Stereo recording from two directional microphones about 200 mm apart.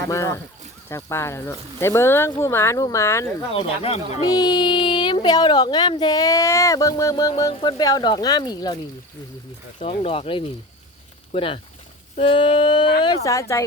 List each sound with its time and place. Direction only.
0.1 s speech: 15° left (ahead or behind)
3.5 s speech: 30° left (ahead or behind)
9.8 s speech: 30° left (ahead or behind)